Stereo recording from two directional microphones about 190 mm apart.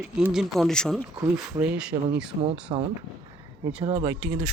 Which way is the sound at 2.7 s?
25° right (ahead or behind).